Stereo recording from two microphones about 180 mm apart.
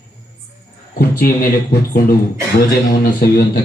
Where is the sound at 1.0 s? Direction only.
60° left (ahead or behind).